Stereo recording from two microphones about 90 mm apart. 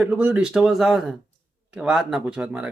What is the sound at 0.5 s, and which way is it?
Speech, 5° right (ahead or behind).